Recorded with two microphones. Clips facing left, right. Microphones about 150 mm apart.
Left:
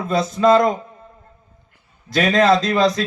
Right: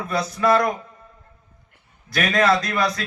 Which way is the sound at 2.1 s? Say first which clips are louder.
Left 4 dB; 20° left (ahead or behind).